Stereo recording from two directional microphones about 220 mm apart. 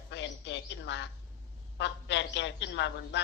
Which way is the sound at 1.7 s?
50° left (ahead or behind).